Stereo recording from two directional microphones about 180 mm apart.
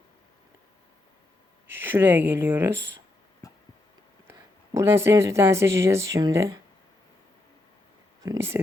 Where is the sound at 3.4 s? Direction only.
20° left (ahead or behind).